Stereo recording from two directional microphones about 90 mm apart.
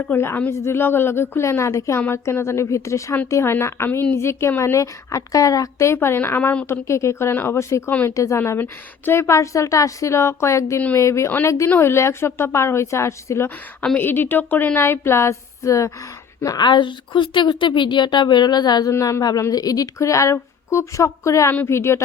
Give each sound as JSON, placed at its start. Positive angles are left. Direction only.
{"t": 0.0, "sound": "a woman's voice", "side_deg": 25}
{"t": 7.9, "sound": "speech", "side_deg": 20}
{"t": 8.1, "sound": "a woman's voice", "side_deg": 35}
{"t": 16.6, "sound": "a woman's voice", "side_deg": 60}
{"t": 18.9, "sound": "a woman's voice", "side_deg": 35}